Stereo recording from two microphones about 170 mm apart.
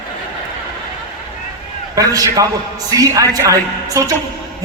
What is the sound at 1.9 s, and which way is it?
A man's voice, 20° right (ahead or behind).